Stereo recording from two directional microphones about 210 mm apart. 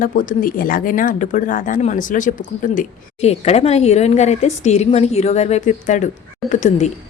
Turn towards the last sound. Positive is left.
turn(degrees=35)  # may be behind; listen again after turning